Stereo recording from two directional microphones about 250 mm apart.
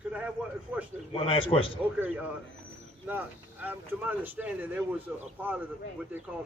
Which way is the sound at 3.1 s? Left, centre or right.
Centre.